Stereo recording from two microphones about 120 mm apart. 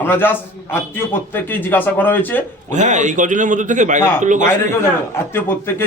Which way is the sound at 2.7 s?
90° right.